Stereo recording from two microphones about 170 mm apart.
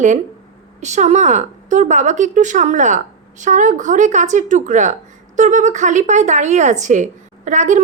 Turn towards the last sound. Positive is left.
turn(degrees=-45)  # may be behind; listen again after turning